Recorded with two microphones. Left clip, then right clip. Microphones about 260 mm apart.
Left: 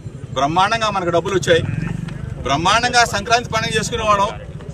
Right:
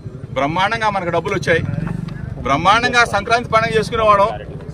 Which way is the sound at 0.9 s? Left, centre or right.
Centre.